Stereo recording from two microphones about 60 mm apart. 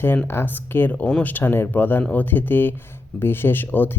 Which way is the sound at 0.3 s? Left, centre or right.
Left.